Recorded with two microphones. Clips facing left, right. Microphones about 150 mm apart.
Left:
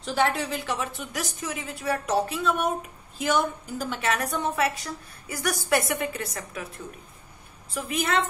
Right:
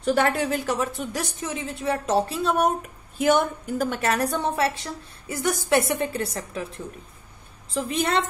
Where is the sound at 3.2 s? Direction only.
50° right (ahead or behind); by 6.7 s 30° right (ahead or behind).